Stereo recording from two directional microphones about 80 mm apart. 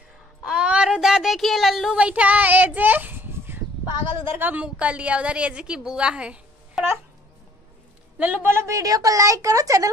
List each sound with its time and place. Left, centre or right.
0.4 s a sound: centre
2.0 s a woman's voice: centre
8.2 s a woman's voice: centre
8.5 s a woman's voice: right